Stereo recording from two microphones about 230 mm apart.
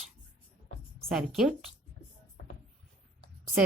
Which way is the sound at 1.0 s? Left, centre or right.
Centre.